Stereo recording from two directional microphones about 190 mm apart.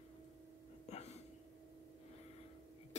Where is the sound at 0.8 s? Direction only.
35° left (ahead or behind).